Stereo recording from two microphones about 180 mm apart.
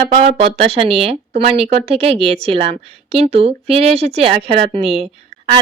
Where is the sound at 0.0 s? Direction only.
35° right (ahead or behind).